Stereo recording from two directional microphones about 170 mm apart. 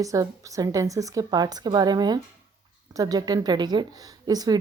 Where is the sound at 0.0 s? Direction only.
20° right (ahead or behind).